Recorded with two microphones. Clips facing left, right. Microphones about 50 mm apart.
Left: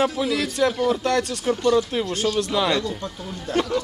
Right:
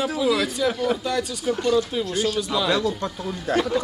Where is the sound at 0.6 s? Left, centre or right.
Left.